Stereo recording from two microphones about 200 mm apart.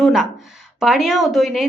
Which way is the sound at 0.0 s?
Centre (ahead or behind).